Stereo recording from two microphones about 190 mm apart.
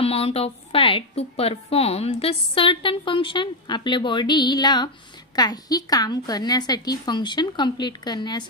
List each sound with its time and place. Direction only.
0.0 s a woman's voice: 30° left (ahead or behind)